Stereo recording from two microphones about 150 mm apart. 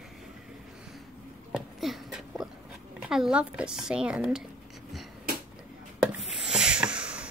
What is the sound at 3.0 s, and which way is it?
Speech, 5° right (ahead or behind).